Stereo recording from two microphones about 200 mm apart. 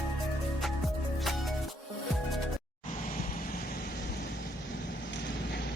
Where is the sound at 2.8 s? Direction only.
40° left (ahead or behind); by 5.6 s 60° left (ahead or behind).